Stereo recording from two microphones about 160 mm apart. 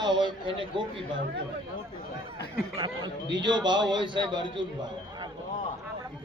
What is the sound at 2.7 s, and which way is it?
A man's voice, 30° right (ahead or behind).